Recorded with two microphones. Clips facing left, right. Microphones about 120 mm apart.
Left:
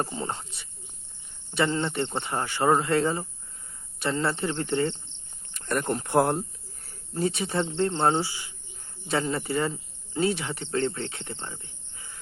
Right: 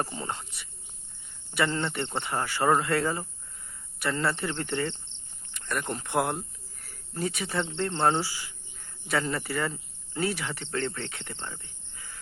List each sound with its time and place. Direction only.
0.2 s speech: 30° left (ahead or behind)
5.5 s speech: 40° left (ahead or behind)
11.4 s cricket: 25° left (ahead or behind)